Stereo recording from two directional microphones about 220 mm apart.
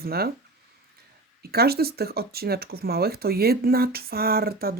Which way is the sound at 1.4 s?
45° right (ahead or behind).